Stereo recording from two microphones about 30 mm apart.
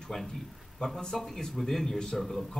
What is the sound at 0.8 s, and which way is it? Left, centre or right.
Speech, left.